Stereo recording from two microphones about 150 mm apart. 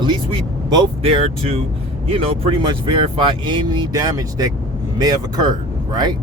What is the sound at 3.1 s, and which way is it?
Speech, 35° right (ahead or behind).